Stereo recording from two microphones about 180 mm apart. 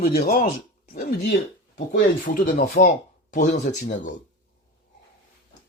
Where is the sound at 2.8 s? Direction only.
40° left (ahead or behind).